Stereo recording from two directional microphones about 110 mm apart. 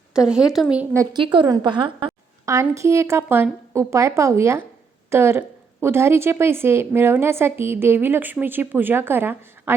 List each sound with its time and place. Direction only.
0.1 s speech: 5° right (ahead or behind)
1.1 s a woman's voice: 50° right (ahead or behind)
2.5 s a woman's voice: 30° right (ahead or behind)
3.8 s a woman's voice: 25° right (ahead or behind)